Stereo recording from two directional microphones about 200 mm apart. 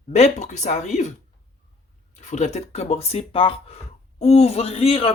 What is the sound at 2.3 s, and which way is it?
Speech, 35° left (ahead or behind).